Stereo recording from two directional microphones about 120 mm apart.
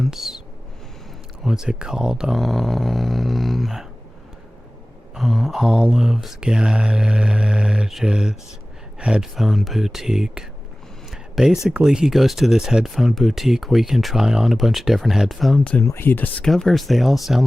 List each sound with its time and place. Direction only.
0.0 s speech: centre (ahead or behind)
1.5 s speech: 5° right (ahead or behind)
5.1 s speech: centre (ahead or behind)
11.1 s a sound: centre (ahead or behind)
11.7 s speech: 5° right (ahead or behind)
15.5 s speech: 10° left (ahead or behind)
15.8 s speech: 20° left (ahead or behind)
16.4 s speech: 5° left (ahead or behind)